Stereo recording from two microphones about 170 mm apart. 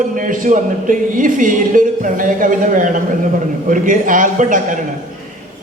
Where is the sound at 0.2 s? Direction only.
50° right (ahead or behind).